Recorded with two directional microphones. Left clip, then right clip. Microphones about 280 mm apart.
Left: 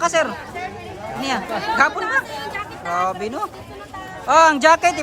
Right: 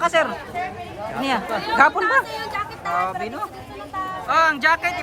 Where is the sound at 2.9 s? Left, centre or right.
Centre.